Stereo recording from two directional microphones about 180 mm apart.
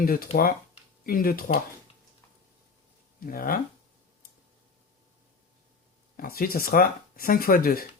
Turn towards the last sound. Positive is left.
turn(degrees=55)  # may be behind; listen again after turning